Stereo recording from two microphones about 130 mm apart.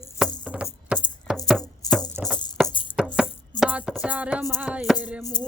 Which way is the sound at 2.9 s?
5° right (ahead or behind).